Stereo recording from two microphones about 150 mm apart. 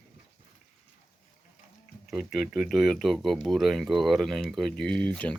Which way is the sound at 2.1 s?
Centre (ahead or behind).